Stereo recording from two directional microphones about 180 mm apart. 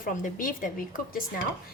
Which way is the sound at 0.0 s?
50° left (ahead or behind).